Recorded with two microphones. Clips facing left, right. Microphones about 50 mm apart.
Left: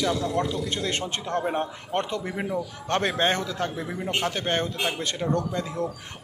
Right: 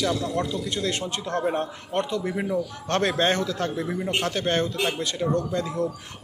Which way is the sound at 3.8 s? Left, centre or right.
Centre.